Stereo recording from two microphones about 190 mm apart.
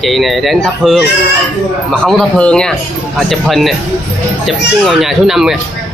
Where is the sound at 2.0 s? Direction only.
5° left (ahead or behind).